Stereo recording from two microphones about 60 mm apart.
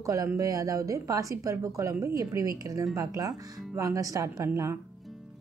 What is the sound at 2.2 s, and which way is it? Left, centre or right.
Speech, right.